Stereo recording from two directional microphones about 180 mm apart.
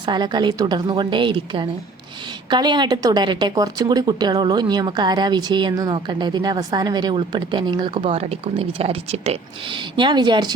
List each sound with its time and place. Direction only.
0.0 s speech: 25° right (ahead or behind)